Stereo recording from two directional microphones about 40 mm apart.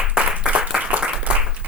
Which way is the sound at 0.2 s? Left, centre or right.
Right.